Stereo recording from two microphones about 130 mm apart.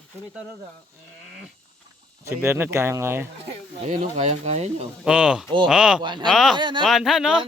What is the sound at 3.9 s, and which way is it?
Speech, 75° right (ahead or behind).